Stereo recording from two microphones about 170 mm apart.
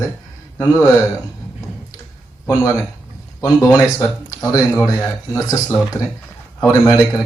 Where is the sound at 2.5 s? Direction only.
15° left (ahead or behind).